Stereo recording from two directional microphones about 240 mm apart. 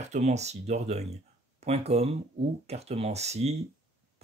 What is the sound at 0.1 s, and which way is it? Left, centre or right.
Speech, right.